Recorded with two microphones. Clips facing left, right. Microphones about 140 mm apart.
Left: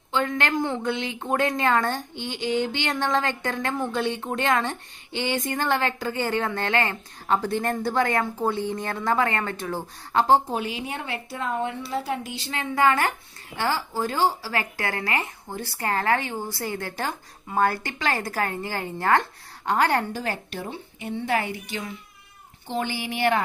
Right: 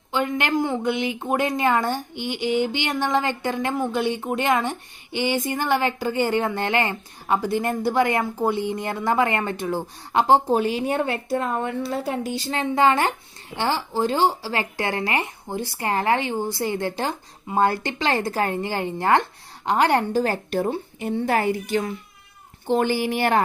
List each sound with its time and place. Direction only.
0.1 s speech: 15° right (ahead or behind)
10.5 s a woman's voice: 40° right (ahead or behind); by 20.1 s 20° right (ahead or behind)
20.1 s a woman's voice: 40° right (ahead or behind)